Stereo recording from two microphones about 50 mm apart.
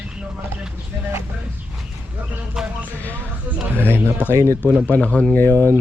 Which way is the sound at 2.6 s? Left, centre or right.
Centre.